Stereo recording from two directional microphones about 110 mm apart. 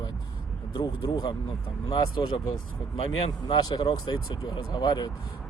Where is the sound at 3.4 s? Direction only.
45° left (ahead or behind).